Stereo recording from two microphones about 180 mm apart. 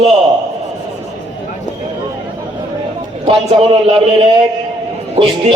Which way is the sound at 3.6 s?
30° right (ahead or behind).